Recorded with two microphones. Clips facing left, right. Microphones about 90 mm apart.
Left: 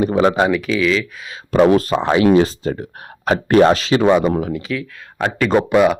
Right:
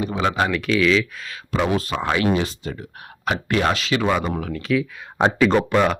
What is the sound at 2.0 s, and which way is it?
Speech, 30° left (ahead or behind).